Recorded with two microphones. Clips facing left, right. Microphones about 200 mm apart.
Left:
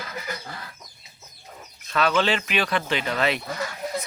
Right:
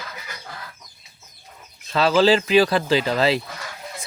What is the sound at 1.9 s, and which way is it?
Speech, 30° right (ahead or behind).